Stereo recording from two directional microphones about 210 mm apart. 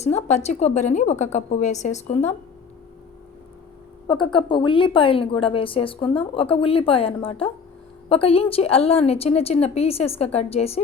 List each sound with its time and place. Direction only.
0.0 s a woman's voice: 35° left (ahead or behind)
4.0 s a woman's voice: 20° left (ahead or behind)